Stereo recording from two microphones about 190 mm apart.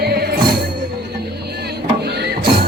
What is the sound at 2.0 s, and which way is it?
Music, 60° right (ahead or behind).